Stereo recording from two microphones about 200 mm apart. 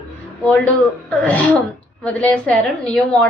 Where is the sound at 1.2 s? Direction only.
5° left (ahead or behind).